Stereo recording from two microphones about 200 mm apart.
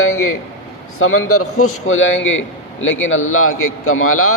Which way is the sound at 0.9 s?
90° left.